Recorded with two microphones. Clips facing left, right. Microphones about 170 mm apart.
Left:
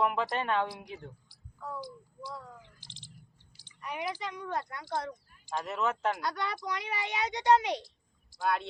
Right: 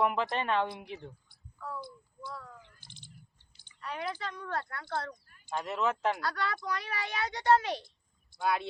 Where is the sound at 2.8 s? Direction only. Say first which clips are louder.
Left 1 dB; 90° left.